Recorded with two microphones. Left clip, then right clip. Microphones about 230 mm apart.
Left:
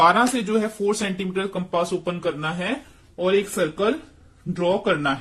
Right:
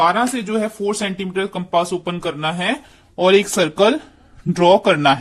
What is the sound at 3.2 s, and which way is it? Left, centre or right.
Speech, right.